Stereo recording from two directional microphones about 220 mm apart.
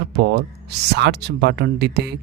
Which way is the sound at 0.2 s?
50° right (ahead or behind).